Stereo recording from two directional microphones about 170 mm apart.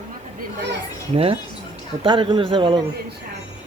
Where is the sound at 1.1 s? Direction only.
35° right (ahead or behind).